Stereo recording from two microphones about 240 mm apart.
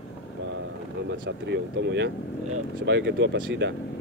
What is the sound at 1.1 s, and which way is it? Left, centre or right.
Speech, right.